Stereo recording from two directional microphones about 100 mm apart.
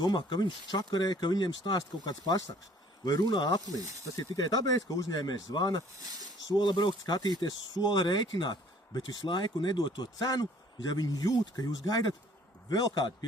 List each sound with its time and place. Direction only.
0.0 s speech: 45° left (ahead or behind)